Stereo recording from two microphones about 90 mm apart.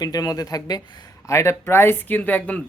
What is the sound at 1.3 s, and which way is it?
Speech, 30° left (ahead or behind).